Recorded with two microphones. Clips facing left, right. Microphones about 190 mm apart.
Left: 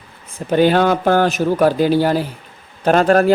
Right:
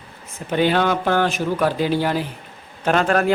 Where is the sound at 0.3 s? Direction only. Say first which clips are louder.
Left 5 dB; 40° left (ahead or behind).